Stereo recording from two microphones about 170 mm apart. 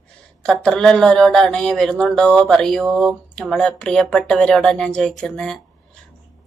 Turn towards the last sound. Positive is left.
turn(degrees=5)  # may be behind; listen again after turning